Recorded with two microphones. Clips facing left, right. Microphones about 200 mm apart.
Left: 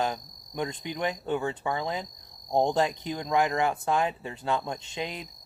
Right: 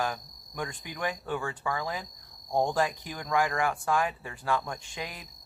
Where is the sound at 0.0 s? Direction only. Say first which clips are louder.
Left 3 dB; 20° left (ahead or behind).